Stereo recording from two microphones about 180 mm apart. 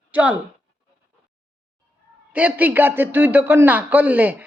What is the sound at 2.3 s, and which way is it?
A man's voice, 10° right (ahead or behind).